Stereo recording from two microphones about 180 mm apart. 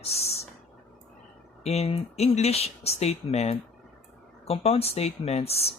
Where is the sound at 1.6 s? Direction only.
35° left (ahead or behind).